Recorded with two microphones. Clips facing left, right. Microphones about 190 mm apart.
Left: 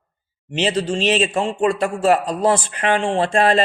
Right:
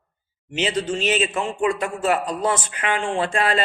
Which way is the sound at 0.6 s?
35° left (ahead or behind).